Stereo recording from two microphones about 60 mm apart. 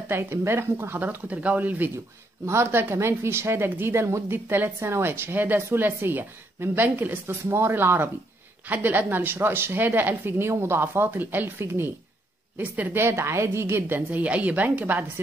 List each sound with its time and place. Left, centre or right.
0.1 s a woman's voice: right
0.9 s a woman's voice: right
2.4 s a woman's voice: right
12.5 s a woman's voice: right
12.9 s a woman's voice: right
14.1 s a woman's voice: right